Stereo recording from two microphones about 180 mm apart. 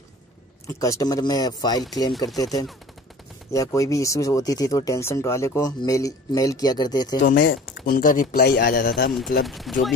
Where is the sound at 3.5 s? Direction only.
15° left (ahead or behind).